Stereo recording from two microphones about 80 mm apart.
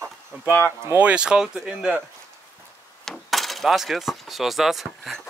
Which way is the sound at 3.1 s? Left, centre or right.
Centre.